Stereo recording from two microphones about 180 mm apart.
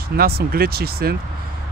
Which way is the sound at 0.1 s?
60° right (ahead or behind).